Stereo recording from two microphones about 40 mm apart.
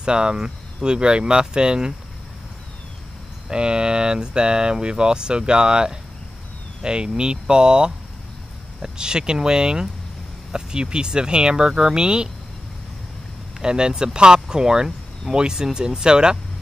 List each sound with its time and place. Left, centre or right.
0.0 s speech: right
3.4 s speech: right
8.9 s speech: right
13.6 s speech: right